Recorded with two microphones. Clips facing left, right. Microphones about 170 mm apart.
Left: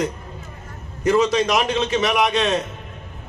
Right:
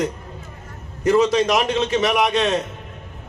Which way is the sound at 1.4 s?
30° right (ahead or behind).